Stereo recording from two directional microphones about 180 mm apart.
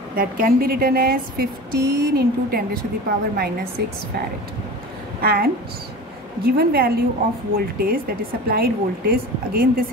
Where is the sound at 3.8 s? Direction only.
65° right (ahead or behind).